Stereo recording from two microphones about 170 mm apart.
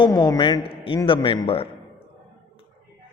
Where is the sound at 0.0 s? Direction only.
20° left (ahead or behind).